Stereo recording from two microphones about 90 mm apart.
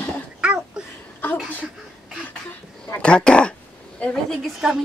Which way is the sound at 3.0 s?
10° left (ahead or behind).